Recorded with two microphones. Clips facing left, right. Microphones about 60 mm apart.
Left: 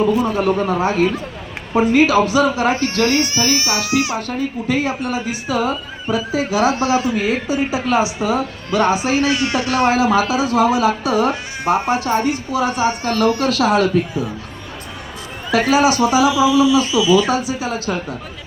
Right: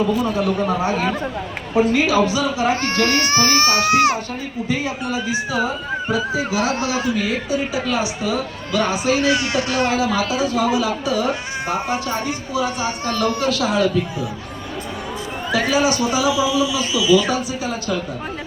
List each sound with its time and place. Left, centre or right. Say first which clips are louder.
0.3 s a sound: left 2 dB; left
1.9 s speech: left 7 dB; left
2.8 s speech: left 2 dB; right
4.3 s a woman's voice: left 4 dB; left
6.1 s a woman's voice: left 5 dB; left
15.7 s a woman's voice: left 6 dB; left